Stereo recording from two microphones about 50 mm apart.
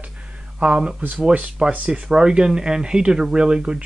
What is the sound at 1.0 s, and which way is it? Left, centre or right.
Speech, right.